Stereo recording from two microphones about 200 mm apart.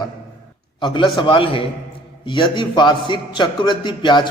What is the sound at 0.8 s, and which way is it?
A man's voice, 25° left (ahead or behind).